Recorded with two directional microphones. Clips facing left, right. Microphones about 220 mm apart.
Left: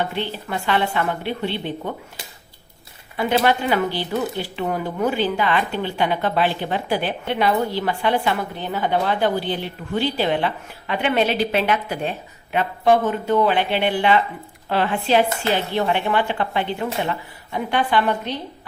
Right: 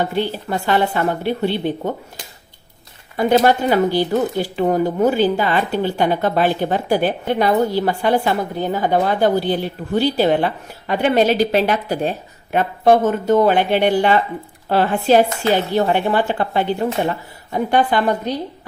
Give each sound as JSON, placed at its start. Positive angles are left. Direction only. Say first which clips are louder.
{"t": 0.0, "sound": "speech", "louder": "right 5 dB", "side_deg": -40}
{"t": 3.2, "sound": "a woman's voice", "louder": "right 5 dB", "side_deg": -40}